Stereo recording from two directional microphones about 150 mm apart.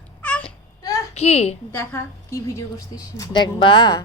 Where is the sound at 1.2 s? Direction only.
45° left (ahead or behind).